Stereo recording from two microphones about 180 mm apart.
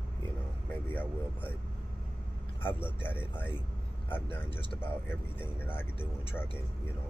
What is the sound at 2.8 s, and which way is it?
Speech, 10° left (ahead or behind).